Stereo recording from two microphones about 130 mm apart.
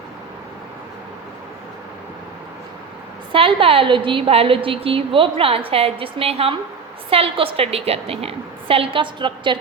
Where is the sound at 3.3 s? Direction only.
40° right (ahead or behind).